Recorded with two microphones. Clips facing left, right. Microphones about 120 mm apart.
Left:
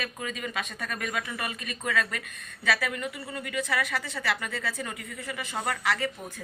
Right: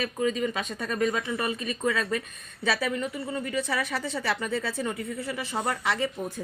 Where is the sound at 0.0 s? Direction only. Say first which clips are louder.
Right 8 dB; 30° right (ahead or behind).